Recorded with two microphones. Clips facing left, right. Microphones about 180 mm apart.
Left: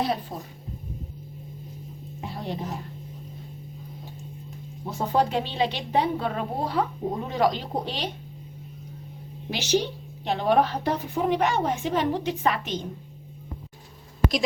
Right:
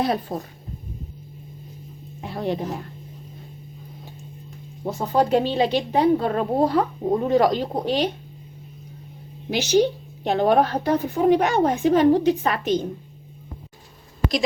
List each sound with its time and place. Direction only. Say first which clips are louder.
0.0 s a woman's voice: right 4 dB; 50° right (ahead or behind)
2.3 s a woman's voice: right 8 dB; 65° right (ahead or behind)
4.9 s a woman's voice: right 4 dB; 40° right (ahead or behind)
9.5 s a woman's voice: right 6 dB; 45° right (ahead or behind)